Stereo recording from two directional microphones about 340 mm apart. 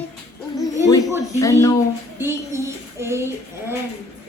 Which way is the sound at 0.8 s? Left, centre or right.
Centre.